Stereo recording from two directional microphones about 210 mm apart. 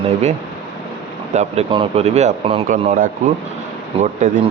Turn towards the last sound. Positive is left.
turn(degrees=-40)  # may be behind; listen again after turning